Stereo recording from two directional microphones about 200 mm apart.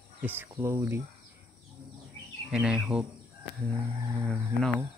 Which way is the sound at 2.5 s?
5° right (ahead or behind).